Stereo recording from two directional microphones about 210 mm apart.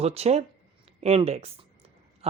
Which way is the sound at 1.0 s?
30° right (ahead or behind).